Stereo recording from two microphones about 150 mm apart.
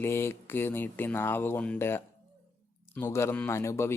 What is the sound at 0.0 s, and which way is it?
Speech, 15° left (ahead or behind).